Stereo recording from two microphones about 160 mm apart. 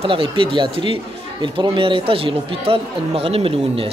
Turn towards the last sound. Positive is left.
turn(degrees=-35)  # may be behind; listen again after turning